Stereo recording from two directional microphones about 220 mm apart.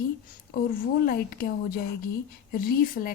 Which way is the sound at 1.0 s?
40° left (ahead or behind).